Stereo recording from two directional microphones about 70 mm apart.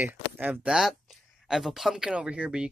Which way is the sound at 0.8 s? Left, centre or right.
Centre.